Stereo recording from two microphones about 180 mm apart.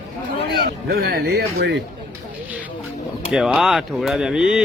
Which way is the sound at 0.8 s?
60° right (ahead or behind).